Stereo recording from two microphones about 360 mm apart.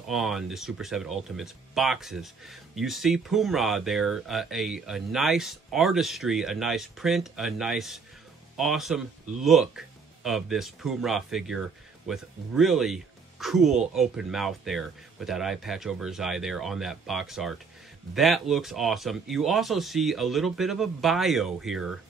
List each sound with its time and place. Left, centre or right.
0.0 s speech: centre